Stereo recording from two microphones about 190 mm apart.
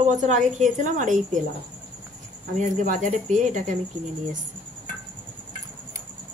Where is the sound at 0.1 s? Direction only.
40° right (ahead or behind).